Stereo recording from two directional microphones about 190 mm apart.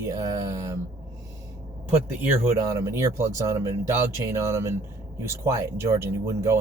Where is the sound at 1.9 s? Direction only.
10° right (ahead or behind).